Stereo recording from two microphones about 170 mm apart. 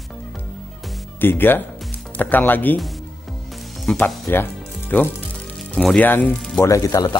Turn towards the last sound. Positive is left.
turn(degrees=20)  # may be behind; listen again after turning